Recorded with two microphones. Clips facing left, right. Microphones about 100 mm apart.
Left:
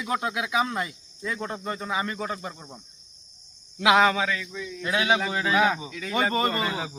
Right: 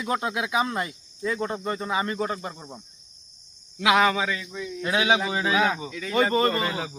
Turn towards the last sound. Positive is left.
turn(degrees=0)  # may be behind; listen again after turning